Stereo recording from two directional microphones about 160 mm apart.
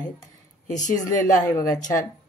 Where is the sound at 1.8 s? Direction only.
55° left (ahead or behind).